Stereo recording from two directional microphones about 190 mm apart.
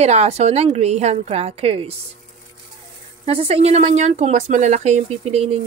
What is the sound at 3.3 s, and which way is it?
Speech, 30° right (ahead or behind).